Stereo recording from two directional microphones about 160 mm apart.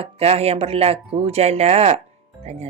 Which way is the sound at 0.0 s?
40° right (ahead or behind).